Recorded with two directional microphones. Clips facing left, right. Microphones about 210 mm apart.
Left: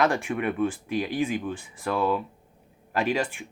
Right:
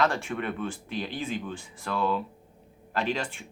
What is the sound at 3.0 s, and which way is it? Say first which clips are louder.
Speech: left 4 dB; 15° left (ahead or behind).